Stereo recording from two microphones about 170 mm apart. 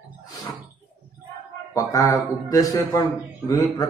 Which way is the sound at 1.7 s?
20° left (ahead or behind).